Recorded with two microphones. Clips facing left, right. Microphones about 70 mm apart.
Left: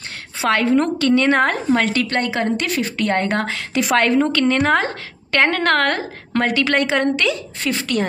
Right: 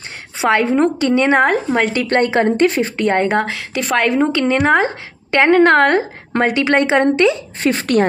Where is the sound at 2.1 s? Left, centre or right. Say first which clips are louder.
Right 6 dB; right.